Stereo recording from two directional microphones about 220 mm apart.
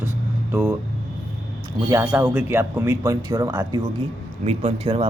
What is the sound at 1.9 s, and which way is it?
Speech, 10° right (ahead or behind).